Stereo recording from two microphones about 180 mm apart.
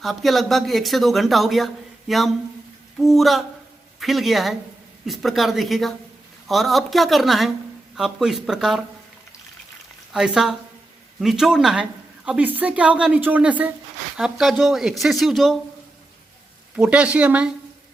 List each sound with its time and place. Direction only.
0.0 s speech: centre (ahead or behind)
10.1 s a woman's voice: 5° right (ahead or behind)
16.7 s a woman's voice: 5° right (ahead or behind)